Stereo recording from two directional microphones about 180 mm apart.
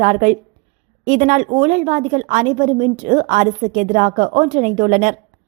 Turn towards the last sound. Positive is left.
turn(degrees=-45)  # may be behind; listen again after turning